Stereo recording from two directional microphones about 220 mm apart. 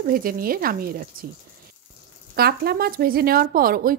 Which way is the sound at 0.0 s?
40° right (ahead or behind).